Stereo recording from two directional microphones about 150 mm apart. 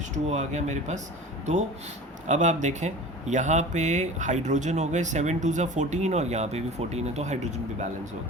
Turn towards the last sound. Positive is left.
turn(degrees=-50)  # may be behind; listen again after turning